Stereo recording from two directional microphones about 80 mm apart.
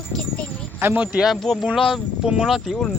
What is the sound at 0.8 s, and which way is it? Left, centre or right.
Speech, right.